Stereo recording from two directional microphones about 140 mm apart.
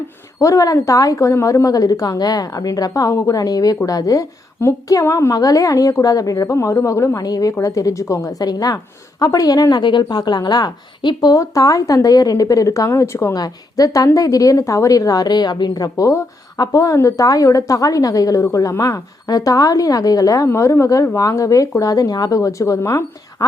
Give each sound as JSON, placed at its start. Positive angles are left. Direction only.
{"t": 0.3, "sound": "a woman's voice", "side_deg": 25}